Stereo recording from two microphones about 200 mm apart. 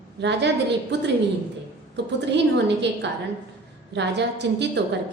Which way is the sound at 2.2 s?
60° right (ahead or behind).